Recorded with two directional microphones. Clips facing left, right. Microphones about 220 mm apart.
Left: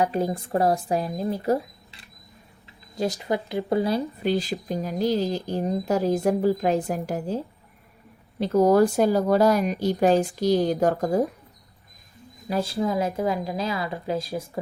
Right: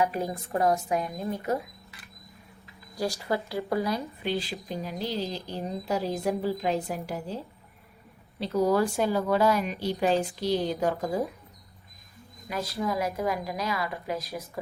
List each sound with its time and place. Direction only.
0.0 s speech: 30° left (ahead or behind)
4.2 s speech: 45° left (ahead or behind)
12.5 s speech: 30° left (ahead or behind)